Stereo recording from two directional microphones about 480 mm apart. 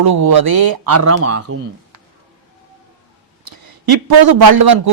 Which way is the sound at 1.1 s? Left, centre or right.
Right.